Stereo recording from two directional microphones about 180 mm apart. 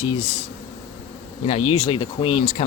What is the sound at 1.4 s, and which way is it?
Speech, 35° left (ahead or behind).